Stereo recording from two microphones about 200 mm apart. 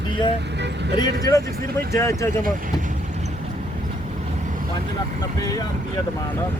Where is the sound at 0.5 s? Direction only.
60° right (ahead or behind).